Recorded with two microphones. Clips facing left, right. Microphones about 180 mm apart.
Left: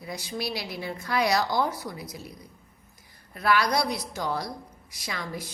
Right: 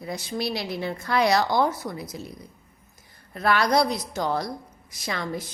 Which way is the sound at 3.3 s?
50° right (ahead or behind).